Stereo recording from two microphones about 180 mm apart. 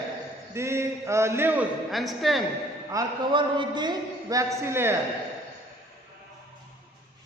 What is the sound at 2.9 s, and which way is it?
A man's voice, 25° right (ahead or behind).